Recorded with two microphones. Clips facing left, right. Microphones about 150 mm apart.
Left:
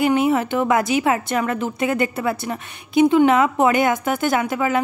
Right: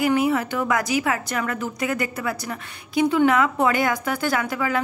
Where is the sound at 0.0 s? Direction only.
25° left (ahead or behind).